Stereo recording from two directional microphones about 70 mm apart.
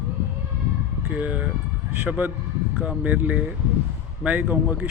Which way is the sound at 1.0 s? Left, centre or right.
Right.